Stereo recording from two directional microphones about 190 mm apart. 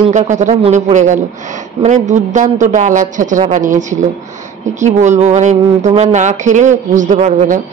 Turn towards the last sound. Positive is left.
turn(degrees=-40)  # may be behind; listen again after turning